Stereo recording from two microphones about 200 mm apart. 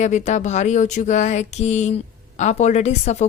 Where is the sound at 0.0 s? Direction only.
35° left (ahead or behind).